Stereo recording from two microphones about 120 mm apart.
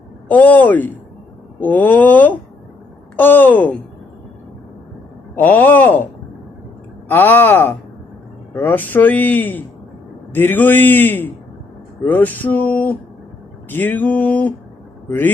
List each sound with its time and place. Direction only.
0.3 s speech: 15° left (ahead or behind)
5.3 s speech: 15° left (ahead or behind)
7.1 s speech: 15° left (ahead or behind)